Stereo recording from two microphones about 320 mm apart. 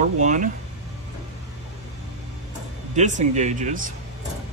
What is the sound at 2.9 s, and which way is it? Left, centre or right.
Speech, right.